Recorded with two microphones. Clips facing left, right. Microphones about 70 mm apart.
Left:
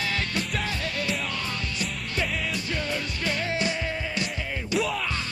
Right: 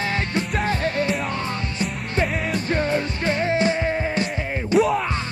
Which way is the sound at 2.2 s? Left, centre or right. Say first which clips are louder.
Right 6 dB; right.